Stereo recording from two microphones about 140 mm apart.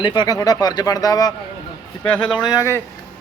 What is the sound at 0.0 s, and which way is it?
Speech, 30° left (ahead or behind).